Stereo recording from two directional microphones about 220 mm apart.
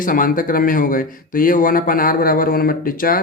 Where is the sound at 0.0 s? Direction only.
40° left (ahead or behind).